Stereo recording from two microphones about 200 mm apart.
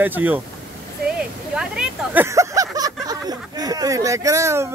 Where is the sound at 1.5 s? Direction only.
5° right (ahead or behind).